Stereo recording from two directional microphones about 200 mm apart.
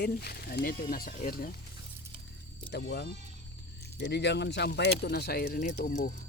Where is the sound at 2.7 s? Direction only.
55° left (ahead or behind); by 6.1 s 40° left (ahead or behind).